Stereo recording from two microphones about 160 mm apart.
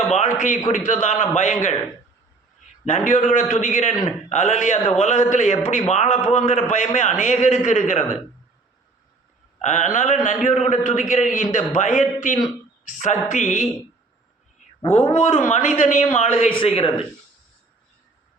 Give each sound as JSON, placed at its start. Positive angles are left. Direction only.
{"t": 0.1, "sound": "a man's voice", "side_deg": 50}
{"t": 2.8, "sound": "a man's voice", "side_deg": 50}
{"t": 9.6, "sound": "a man's voice", "side_deg": 50}
{"t": 14.8, "sound": "a man's voice", "side_deg": 40}